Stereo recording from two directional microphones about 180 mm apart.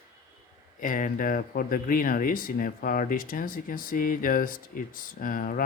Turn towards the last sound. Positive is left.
turn(degrees=50)  # may be behind; listen again after turning